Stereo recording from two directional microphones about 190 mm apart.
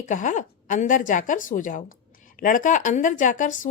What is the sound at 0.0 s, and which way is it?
A woman's voice, 40° left (ahead or behind).